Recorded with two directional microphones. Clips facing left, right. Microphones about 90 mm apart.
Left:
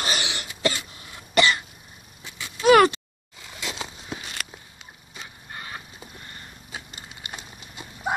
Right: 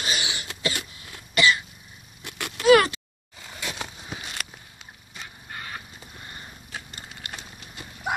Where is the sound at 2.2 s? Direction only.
65° right (ahead or behind).